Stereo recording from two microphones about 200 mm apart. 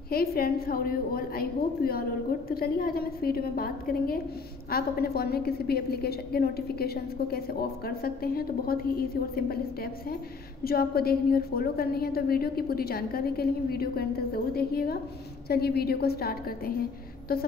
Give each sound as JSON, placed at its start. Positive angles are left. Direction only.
{"t": 0.1, "sound": "a woman's voice", "side_deg": 50}
{"t": 10.6, "sound": "a woman's voice", "side_deg": 50}